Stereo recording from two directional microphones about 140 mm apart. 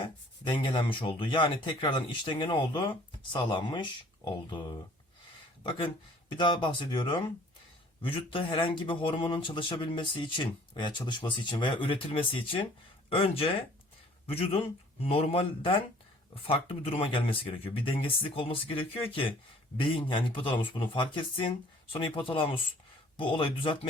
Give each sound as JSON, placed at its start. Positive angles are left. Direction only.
{"t": 0.0, "sound": "speech", "side_deg": 35}
{"t": 5.6, "sound": "speech", "side_deg": 35}